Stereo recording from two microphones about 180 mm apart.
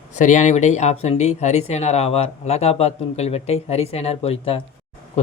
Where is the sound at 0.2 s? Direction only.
40° left (ahead or behind).